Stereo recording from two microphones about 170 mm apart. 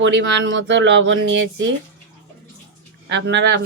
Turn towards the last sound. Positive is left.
turn(degrees=-90)